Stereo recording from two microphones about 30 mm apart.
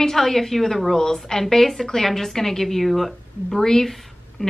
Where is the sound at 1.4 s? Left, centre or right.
Centre.